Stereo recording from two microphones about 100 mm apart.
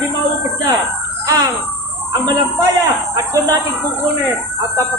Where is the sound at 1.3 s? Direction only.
40° right (ahead or behind).